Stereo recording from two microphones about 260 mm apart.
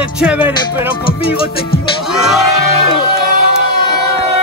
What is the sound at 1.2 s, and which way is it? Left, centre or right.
Music, left.